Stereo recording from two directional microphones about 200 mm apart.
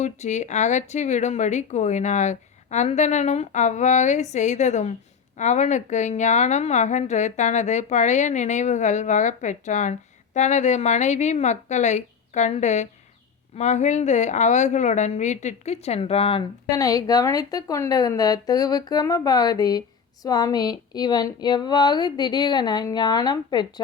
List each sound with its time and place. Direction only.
0.0 s speech: 35° left (ahead or behind)
16.7 s speech: 20° left (ahead or behind)